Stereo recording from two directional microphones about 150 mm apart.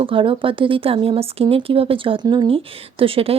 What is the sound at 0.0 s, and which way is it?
Speech, 35° right (ahead or behind).